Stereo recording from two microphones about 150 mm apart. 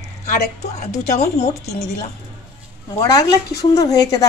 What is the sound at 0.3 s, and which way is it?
A woman's voice, 50° left (ahead or behind).